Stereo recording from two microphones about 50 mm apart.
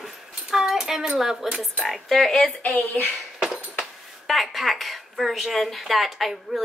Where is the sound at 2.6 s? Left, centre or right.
Left.